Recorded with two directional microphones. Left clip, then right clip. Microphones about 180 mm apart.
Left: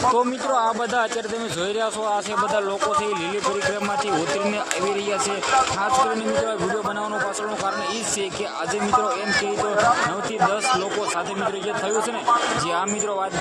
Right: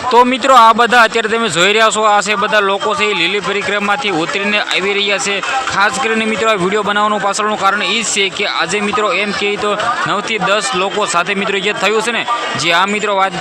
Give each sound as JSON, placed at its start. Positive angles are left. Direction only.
{"t": 0.1, "sound": "speech", "side_deg": -20}